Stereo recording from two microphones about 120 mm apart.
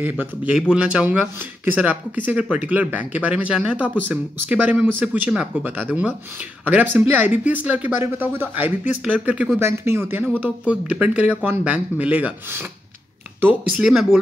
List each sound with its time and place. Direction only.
0.0 s speech: 15° right (ahead or behind)
9.6 s speech: 20° right (ahead or behind)
13.7 s speech: 5° right (ahead or behind)